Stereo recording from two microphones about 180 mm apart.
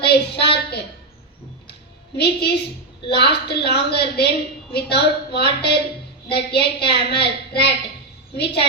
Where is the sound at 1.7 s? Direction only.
65° left (ahead or behind).